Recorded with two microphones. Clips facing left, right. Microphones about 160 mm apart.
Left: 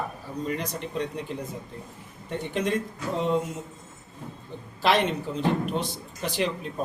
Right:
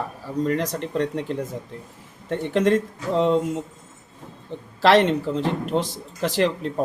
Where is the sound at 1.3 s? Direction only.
85° right.